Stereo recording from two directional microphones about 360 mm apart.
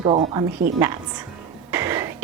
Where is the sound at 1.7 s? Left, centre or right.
Centre.